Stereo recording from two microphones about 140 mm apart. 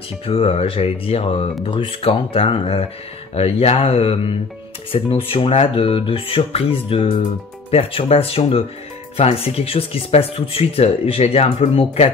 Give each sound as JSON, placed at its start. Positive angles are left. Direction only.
{"t": 0.3, "sound": "speech", "side_deg": 45}